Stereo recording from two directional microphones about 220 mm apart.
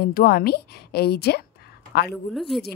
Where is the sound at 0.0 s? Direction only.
45° left (ahead or behind).